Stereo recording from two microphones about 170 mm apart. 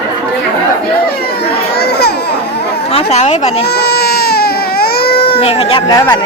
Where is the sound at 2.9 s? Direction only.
40° left (ahead or behind).